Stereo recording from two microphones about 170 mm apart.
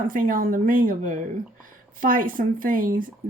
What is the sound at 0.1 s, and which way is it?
Speech, 55° right (ahead or behind).